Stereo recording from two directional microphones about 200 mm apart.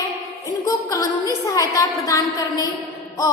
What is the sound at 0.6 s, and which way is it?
A woman's voice, 15° left (ahead or behind).